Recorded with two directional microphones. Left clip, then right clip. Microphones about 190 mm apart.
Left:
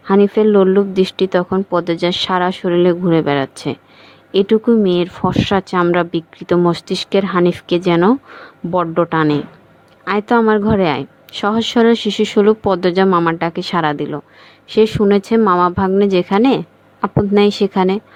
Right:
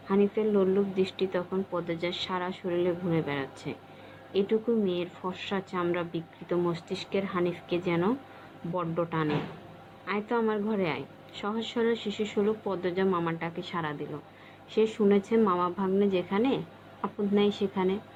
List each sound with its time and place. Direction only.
0.1 s a woman's voice: 55° left (ahead or behind)